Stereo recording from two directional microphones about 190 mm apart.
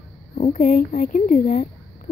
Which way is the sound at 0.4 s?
45° left (ahead or behind).